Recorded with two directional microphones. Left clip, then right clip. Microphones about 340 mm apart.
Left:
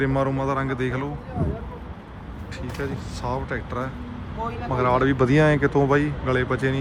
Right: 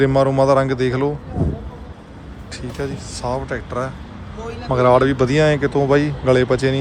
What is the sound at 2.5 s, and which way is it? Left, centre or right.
Speech, centre.